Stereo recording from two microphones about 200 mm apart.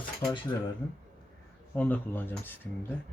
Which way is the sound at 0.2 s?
25° left (ahead or behind).